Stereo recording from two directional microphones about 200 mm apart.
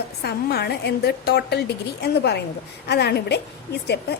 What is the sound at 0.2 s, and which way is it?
A woman's voice, 55° left (ahead or behind).